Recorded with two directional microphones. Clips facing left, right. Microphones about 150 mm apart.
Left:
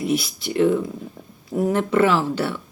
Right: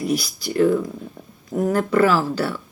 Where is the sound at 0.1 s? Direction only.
25° left (ahead or behind).